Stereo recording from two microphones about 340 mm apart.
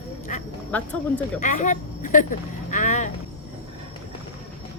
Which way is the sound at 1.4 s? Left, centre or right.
Left.